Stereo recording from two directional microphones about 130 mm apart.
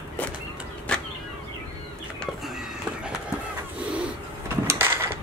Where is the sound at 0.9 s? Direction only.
10° left (ahead or behind).